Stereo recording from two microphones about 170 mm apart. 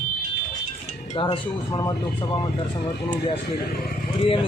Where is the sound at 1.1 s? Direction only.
25° left (ahead or behind).